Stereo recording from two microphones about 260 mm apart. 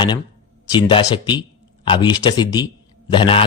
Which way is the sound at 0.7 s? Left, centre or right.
Centre.